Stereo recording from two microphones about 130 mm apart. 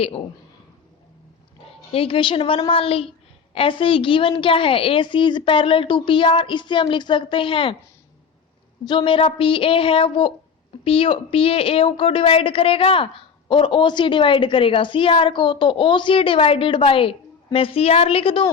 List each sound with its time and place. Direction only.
1.9 s a woman's voice: 45° left (ahead or behind)
8.9 s a woman's voice: 40° left (ahead or behind)